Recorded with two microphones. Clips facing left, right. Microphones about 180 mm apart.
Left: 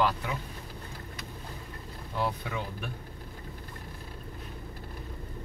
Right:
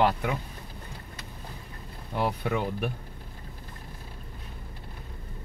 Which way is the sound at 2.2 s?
65° right (ahead or behind).